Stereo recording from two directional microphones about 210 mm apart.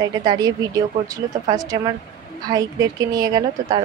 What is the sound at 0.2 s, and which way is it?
Speech, 20° right (ahead or behind).